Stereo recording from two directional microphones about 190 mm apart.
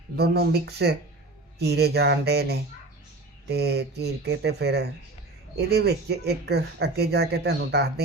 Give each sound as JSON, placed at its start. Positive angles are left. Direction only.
{"t": 0.2, "sound": "speech", "side_deg": -60}